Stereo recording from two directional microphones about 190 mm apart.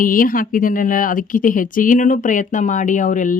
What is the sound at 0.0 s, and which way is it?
Speech, 45° left (ahead or behind).